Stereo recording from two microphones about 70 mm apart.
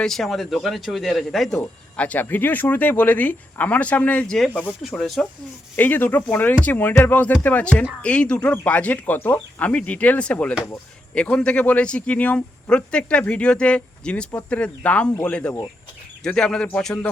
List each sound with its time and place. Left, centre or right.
0.0 s speech: centre
2.0 s speech: left
4.9 s speech: centre
5.7 s speech: left